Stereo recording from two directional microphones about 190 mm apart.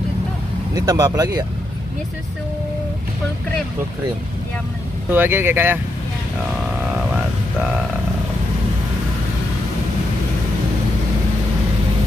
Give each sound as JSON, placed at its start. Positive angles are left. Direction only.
{"t": 0.7, "sound": "speech", "side_deg": -20}
{"t": 5.1, "sound": "speech", "side_deg": -10}